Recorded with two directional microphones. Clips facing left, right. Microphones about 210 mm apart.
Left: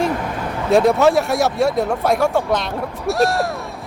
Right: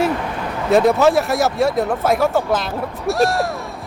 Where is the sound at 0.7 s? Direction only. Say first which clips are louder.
Even; centre (ahead or behind).